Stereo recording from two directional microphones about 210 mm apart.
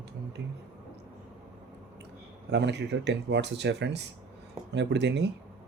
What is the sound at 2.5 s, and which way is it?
A man's voice, 55° right (ahead or behind).